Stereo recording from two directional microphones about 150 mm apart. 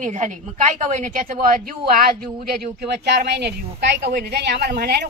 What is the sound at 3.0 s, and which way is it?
Speech, 90° right.